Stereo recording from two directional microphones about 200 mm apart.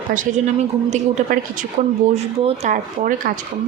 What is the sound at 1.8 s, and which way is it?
Speech, 40° right (ahead or behind).